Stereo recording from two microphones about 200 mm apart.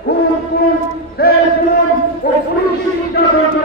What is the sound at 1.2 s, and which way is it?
A man's voice, 50° left (ahead or behind).